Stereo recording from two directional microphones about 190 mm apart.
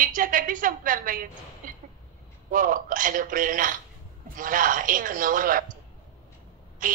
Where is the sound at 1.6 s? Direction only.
45° right (ahead or behind).